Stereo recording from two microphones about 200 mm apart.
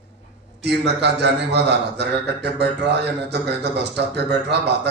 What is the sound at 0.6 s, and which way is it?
A man's voice, 55° right (ahead or behind).